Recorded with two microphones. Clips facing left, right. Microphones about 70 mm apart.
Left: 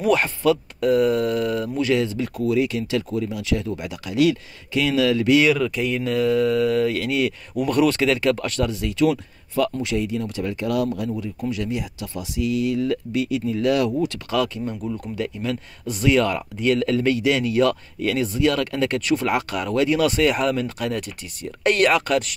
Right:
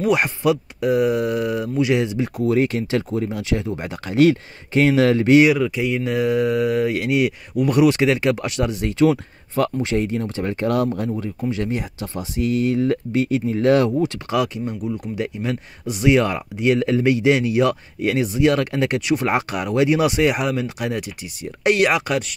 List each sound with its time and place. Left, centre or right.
0.1 s speech: centre
2.5 s speech: right
5.4 s speech: centre
8.8 s speech: right
13.9 s speech: right